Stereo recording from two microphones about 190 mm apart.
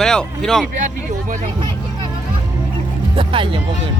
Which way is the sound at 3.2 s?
25° right (ahead or behind).